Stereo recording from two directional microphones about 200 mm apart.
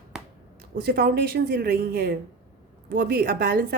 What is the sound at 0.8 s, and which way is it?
A woman's voice, 50° right (ahead or behind).